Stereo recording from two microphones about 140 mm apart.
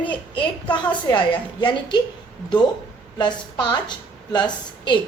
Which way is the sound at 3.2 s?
30° left (ahead or behind).